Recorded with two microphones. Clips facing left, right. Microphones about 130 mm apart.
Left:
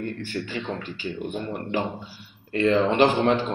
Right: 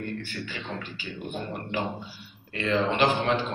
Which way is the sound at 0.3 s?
40° left (ahead or behind).